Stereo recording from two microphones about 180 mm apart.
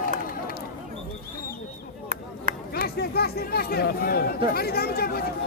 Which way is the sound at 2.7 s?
60° left (ahead or behind).